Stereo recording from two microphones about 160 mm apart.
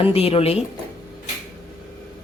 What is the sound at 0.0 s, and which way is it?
Speech, 40° left (ahead or behind).